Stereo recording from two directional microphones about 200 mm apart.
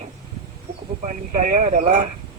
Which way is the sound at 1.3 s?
40° right (ahead or behind).